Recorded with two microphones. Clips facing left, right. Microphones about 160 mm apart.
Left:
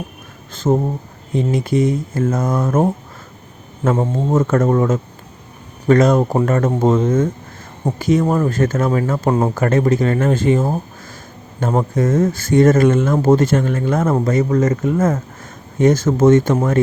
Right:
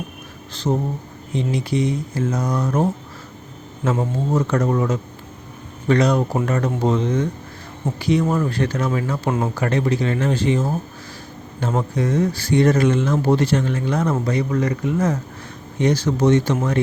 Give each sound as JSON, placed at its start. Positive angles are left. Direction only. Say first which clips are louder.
{"t": 0.5, "sound": "speech", "louder": "left 5 dB", "side_deg": 50}